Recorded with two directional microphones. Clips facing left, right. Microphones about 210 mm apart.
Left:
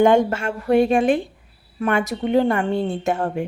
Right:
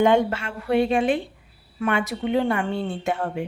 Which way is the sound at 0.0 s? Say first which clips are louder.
Left 3 dB; 45° left (ahead or behind).